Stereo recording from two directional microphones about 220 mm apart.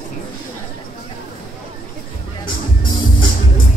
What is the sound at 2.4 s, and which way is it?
Music, 20° left (ahead or behind).